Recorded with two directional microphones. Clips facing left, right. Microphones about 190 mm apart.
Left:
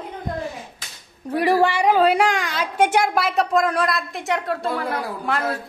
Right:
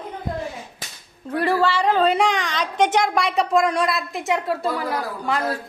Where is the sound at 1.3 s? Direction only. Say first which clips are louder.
Left 2 dB; 15° left (ahead or behind).